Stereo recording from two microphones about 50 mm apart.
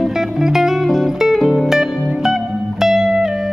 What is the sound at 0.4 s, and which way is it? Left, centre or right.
Music, centre.